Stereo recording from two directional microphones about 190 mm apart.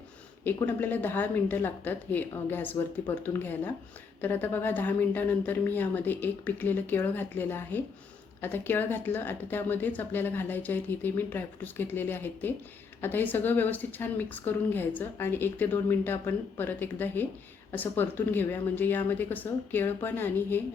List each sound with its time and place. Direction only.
0.4 s a woman's voice: 10° left (ahead or behind)